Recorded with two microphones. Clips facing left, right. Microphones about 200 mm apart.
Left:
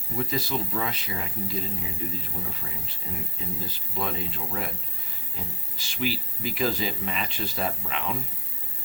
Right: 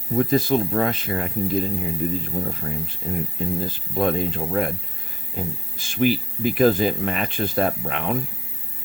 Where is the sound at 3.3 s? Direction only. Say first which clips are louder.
Right 9 dB; 50° right (ahead or behind).